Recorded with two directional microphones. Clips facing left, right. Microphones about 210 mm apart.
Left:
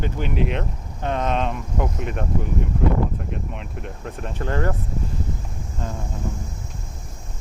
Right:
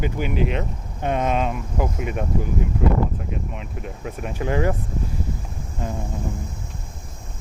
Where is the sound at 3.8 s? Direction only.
5° right (ahead or behind).